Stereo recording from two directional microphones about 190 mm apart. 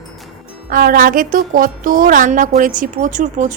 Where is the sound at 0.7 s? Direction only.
50° right (ahead or behind).